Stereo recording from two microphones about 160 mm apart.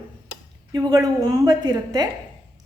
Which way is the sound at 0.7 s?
25° right (ahead or behind).